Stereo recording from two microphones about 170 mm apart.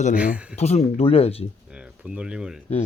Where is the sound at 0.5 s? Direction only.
40° left (ahead or behind).